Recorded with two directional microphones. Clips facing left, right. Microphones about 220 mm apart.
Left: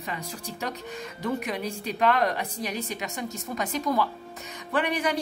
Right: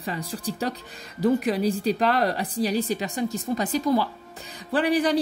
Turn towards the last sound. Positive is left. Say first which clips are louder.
# right 5 dB
turn(degrees=-35)  # may be behind; listen again after turning